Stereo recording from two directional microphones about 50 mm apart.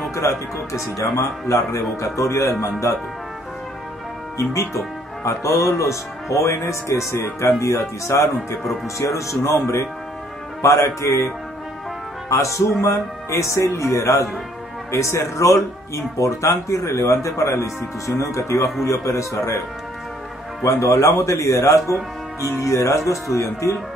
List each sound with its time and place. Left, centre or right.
0.1 s speech: left
2.6 s speech: left
4.4 s speech: left
12.3 s speech: left
20.6 s speech: left